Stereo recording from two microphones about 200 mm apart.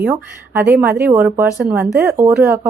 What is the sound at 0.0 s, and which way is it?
A woman's voice, 10° right (ahead or behind).